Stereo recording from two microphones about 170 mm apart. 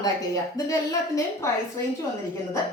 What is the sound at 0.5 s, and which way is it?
Speech, 20° left (ahead or behind).